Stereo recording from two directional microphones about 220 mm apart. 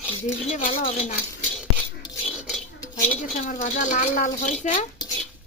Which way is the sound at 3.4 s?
35° left (ahead or behind).